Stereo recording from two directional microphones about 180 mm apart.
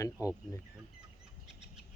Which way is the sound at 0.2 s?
20° left (ahead or behind).